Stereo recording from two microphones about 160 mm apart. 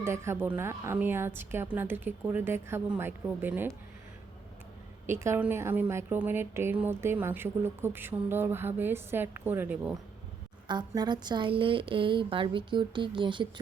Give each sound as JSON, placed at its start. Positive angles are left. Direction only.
{"t": 0.0, "sound": "a woman's voice", "side_deg": -15}
{"t": 5.0, "sound": "a woman's voice", "side_deg": -15}
{"t": 10.7, "sound": "speech", "side_deg": -25}